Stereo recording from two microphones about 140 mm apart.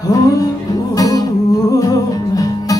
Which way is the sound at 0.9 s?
25° left (ahead or behind).